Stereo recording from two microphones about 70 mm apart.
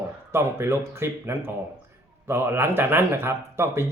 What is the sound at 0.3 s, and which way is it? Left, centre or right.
Speech, right.